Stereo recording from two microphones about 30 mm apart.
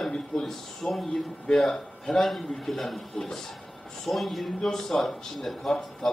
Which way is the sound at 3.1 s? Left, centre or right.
Centre.